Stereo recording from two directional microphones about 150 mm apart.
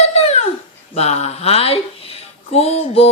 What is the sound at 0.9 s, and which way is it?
Speech, 45° left (ahead or behind).